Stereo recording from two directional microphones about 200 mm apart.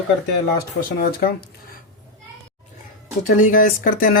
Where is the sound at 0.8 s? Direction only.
50° left (ahead or behind).